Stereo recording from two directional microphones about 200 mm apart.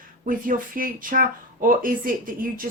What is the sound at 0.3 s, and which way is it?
A woman's voice, 45° right (ahead or behind).